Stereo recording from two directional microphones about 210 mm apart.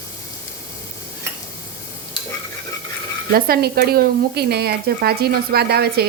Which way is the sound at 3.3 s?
45° right (ahead or behind).